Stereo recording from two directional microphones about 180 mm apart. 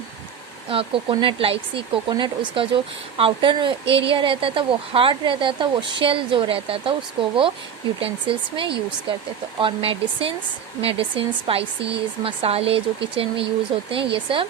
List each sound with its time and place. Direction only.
0.7 s speech: 30° right (ahead or behind)